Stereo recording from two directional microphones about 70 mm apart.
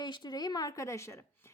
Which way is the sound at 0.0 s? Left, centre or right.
Left.